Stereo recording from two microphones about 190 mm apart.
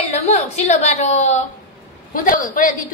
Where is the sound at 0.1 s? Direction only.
35° left (ahead or behind).